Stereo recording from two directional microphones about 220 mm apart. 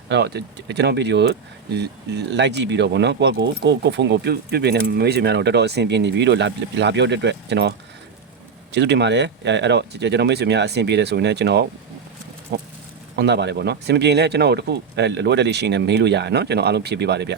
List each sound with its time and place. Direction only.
0.1 s speech: 50° right (ahead or behind)
8.7 s speech: 50° right (ahead or behind)